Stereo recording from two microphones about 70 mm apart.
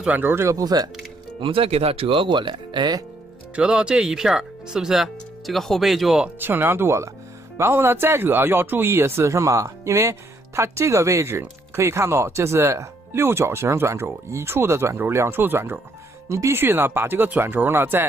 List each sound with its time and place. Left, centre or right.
0.0 s speech: right
0.5 s speech: right
2.7 s speech: right
3.5 s speech: centre
6.4 s speech: right
16.3 s speech: right